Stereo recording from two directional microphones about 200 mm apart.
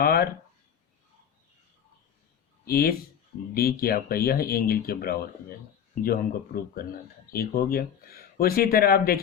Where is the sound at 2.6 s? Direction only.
50° left (ahead or behind).